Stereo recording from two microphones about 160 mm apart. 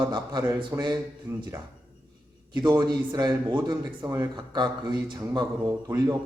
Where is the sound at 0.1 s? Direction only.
25° right (ahead or behind).